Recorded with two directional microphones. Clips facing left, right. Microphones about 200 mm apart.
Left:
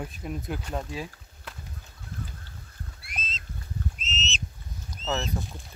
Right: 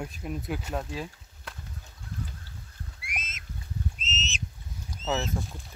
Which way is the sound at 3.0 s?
15° right (ahead or behind).